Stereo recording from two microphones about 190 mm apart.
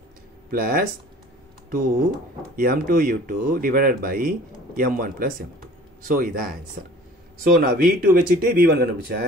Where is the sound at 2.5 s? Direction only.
50° right (ahead or behind).